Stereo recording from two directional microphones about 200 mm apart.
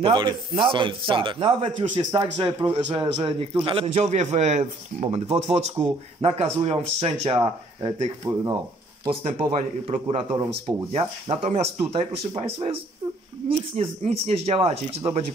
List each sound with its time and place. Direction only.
0.0 s a man's voice: 25° right (ahead or behind)
9.0 s a man's voice: 30° right (ahead or behind)